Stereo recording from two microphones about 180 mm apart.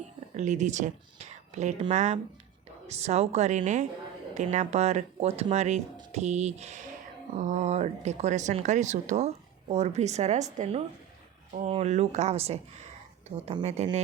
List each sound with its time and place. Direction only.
0.3 s speech: 40° right (ahead or behind)